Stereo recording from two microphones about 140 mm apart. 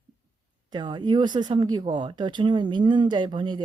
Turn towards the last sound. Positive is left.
turn(degrees=-35)  # may be behind; listen again after turning